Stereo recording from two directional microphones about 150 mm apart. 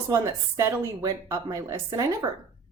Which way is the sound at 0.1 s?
20° right (ahead or behind).